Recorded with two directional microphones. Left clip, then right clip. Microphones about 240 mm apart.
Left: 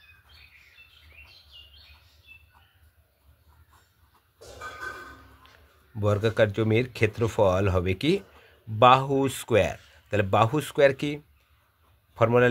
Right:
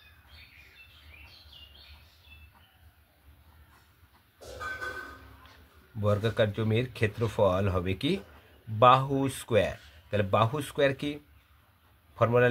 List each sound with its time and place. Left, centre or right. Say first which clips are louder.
5.9 s speech: left 4 dB; left
12.2 s speech: left 3 dB; left